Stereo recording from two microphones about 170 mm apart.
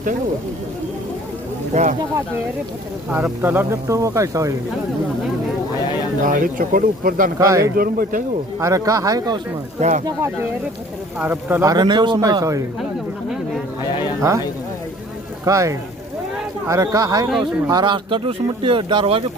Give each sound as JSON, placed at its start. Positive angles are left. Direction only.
{"t": 1.7, "sound": "speech", "side_deg": -45}
{"t": 3.1, "sound": "speech", "side_deg": -10}
{"t": 6.2, "sound": "speech", "side_deg": -55}
{"t": 7.3, "sound": "speech", "side_deg": -20}
{"t": 7.8, "sound": "speech", "side_deg": -60}
{"t": 8.5, "sound": "speech", "side_deg": -20}
{"t": 11.7, "sound": "speech", "side_deg": -25}
{"t": 14.2, "sound": "speech", "side_deg": -20}
{"t": 15.4, "sound": "speech", "side_deg": -20}